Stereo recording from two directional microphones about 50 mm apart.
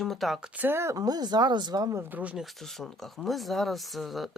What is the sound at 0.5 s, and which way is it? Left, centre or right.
Speech, right.